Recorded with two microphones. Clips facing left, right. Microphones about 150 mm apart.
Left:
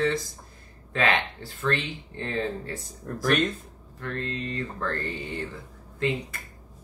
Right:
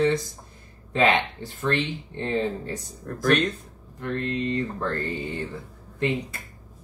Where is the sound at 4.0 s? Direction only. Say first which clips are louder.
Right 5 dB; 20° right (ahead or behind).